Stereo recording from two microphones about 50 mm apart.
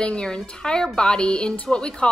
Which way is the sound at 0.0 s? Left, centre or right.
Centre.